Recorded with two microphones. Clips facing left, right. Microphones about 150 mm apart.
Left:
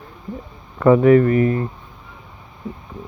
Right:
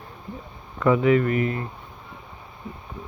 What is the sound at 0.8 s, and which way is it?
Speech, 45° left (ahead or behind).